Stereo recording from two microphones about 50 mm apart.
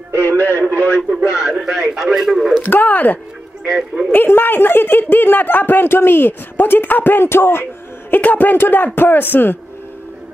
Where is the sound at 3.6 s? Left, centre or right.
Centre.